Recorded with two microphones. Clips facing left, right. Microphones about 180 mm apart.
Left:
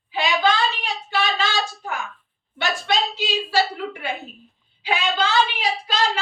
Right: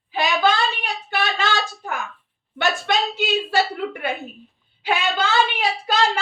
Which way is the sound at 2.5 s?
55° right (ahead or behind).